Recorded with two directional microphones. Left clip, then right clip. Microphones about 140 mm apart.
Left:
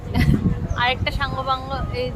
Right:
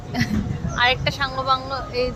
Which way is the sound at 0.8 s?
20° right (ahead or behind).